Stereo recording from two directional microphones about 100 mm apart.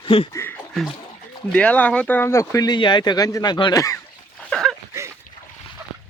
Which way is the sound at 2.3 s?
35° left (ahead or behind).